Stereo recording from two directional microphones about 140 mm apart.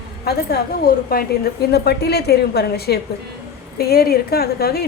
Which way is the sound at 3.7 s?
90° left.